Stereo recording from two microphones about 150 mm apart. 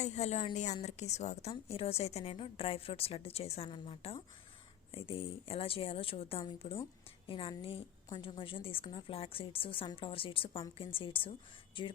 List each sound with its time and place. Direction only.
0.0 s a woman's voice: 45° left (ahead or behind)